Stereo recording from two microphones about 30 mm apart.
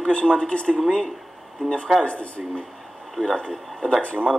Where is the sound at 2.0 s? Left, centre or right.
Left.